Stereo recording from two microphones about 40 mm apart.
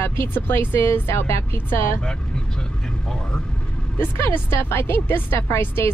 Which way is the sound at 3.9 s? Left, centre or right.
Left.